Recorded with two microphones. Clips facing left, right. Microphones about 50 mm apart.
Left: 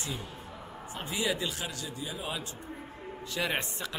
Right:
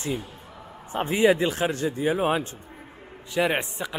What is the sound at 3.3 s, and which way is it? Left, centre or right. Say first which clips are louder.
Speech: right 8 dB; right.